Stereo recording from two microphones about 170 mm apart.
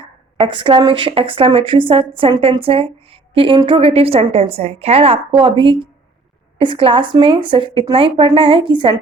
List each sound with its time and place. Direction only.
0.3 s a woman's voice: 30° right (ahead or behind)